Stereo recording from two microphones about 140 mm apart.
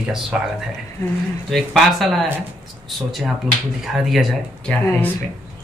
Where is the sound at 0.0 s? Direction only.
10° right (ahead or behind).